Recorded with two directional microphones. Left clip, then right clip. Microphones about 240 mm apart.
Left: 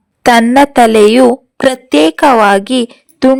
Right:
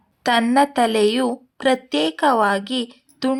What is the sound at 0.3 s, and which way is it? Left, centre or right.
A woman's voice, left.